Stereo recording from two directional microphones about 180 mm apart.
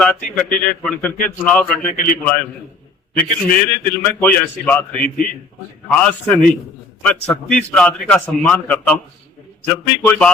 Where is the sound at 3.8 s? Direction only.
10° left (ahead or behind).